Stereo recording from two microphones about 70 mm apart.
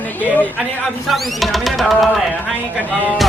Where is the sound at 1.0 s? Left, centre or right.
Centre.